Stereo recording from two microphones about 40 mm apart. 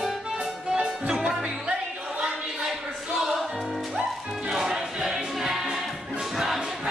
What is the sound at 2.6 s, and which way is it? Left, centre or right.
Choir, centre.